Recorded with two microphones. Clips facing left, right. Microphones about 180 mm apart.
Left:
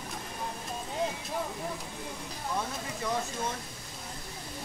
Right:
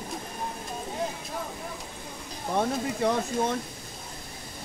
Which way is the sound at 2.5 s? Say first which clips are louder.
Right 10 dB; 65° right (ahead or behind).